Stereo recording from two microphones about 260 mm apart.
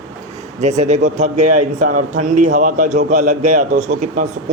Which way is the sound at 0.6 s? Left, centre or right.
Right.